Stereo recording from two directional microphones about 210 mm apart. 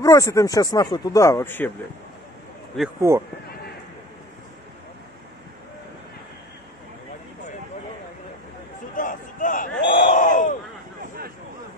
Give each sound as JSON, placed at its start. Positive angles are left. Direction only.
{"t": 0.0, "sound": "speech", "side_deg": 15}
{"t": 3.0, "sound": "speech", "side_deg": -15}
{"t": 8.9, "sound": "a sound", "side_deg": 40}